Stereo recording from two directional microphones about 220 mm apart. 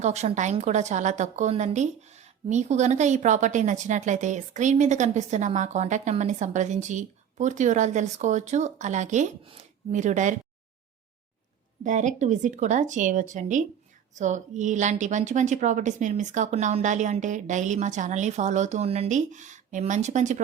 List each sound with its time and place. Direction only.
0.0 s a woman's voice: 30° right (ahead or behind)
11.8 s a woman's voice: 35° right (ahead or behind)